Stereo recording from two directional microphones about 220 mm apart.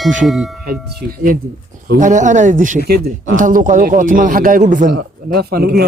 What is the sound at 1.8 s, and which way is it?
Speech, 35° right (ahead or behind).